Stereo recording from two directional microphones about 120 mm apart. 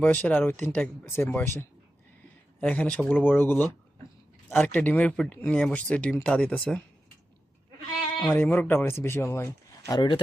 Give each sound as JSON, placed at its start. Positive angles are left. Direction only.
{"t": 0.0, "sound": "speech", "side_deg": 15}
{"t": 8.2, "sound": "speech", "side_deg": 15}